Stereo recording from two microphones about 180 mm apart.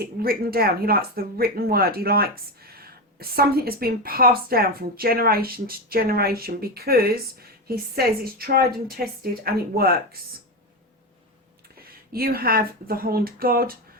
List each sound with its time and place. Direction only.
0.0 s speech: 55° right (ahead or behind)
12.1 s speech: 55° right (ahead or behind)